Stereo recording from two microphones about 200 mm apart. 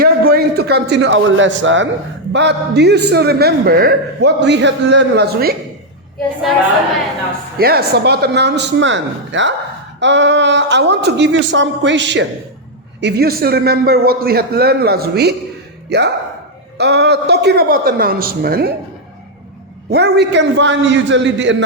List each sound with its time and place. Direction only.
0.0 s a man's voice: 50° right (ahead or behind)
7.6 s a man's voice: 50° right (ahead or behind)
19.9 s a man's voice: 55° right (ahead or behind)